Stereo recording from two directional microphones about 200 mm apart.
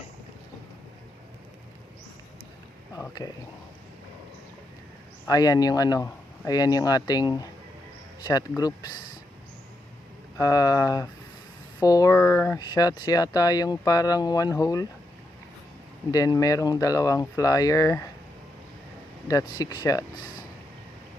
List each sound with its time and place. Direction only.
2.9 s speech: 15° left (ahead or behind)
5.3 s speech: 20° left (ahead or behind)
10.3 s speech: 15° left (ahead or behind)
16.1 s speech: 15° left (ahead or behind)
19.3 s speech: 15° left (ahead or behind)